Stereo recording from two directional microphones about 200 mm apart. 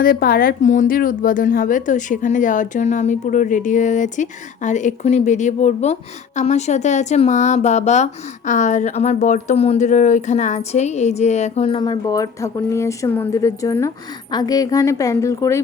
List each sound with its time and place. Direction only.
0.0 s a woman's voice: 50° left (ahead or behind); by 15.6 s 15° left (ahead or behind)